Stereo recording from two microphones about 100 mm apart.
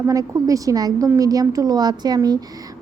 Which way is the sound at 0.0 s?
35° right (ahead or behind).